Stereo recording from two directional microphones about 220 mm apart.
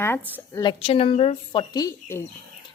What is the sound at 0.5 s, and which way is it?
A woman's voice, 20° left (ahead or behind).